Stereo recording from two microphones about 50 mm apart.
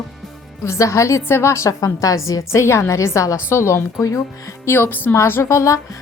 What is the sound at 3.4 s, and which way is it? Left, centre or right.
Speech, left.